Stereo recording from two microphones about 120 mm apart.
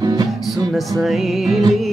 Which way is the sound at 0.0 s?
30° right (ahead or behind).